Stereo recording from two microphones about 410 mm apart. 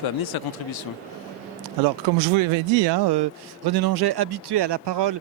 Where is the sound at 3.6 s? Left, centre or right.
Right.